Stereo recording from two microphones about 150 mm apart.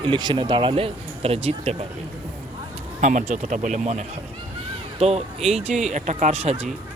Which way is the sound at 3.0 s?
55° right (ahead or behind).